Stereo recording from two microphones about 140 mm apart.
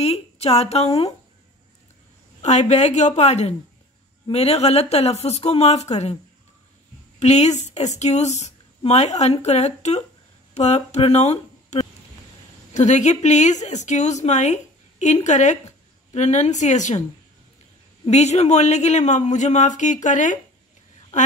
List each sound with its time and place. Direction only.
0.0 s speech: 45° left (ahead or behind)
2.4 s speech: 55° left (ahead or behind)
7.2 s speech: 55° left (ahead or behind)
18.0 s speech: 55° left (ahead or behind)